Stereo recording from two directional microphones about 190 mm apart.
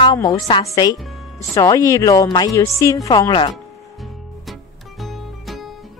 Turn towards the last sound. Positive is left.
turn(degrees=0)  # may be behind; listen again after turning